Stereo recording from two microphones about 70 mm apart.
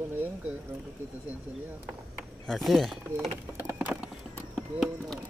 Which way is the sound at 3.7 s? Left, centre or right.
Centre.